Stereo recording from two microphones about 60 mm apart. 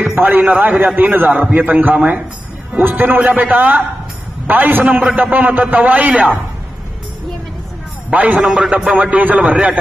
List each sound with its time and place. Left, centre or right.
0.1 s a man's voice: right
8.1 s a man's voice: right
8.4 s a man's voice: centre